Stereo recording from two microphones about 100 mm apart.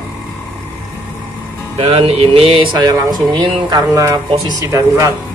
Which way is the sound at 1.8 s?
85° right.